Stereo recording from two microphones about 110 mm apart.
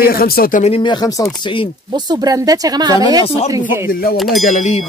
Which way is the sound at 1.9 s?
35° right (ahead or behind).